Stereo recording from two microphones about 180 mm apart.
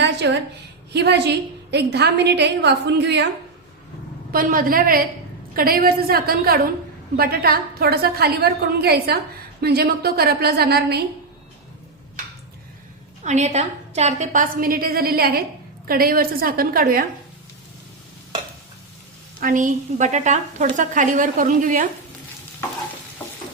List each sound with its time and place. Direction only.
0.0 s a sound: 75° right (ahead or behind)
0.9 s a woman's voice: 70° right (ahead or behind)
4.3 s a woman's voice: 55° right (ahead or behind)
13.2 s a woman's voice: 40° right (ahead or behind); by 17.1 s 55° right (ahead or behind)
19.4 s a woman's voice: 50° right (ahead or behind)